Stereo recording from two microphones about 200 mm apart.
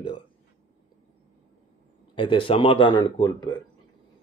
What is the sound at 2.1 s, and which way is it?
Speech, 25° left (ahead or behind).